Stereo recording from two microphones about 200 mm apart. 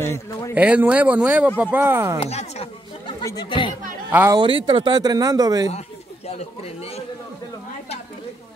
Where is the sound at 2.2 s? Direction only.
30° left (ahead or behind).